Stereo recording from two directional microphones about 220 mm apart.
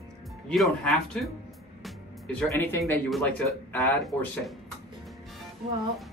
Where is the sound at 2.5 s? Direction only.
10° left (ahead or behind).